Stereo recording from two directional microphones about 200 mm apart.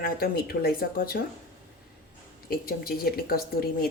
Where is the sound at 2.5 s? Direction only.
50° left (ahead or behind).